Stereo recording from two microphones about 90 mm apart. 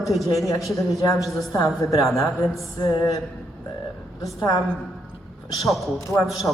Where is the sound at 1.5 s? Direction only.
40° left (ahead or behind).